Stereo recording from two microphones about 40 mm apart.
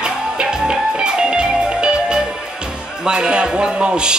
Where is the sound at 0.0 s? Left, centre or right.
Centre.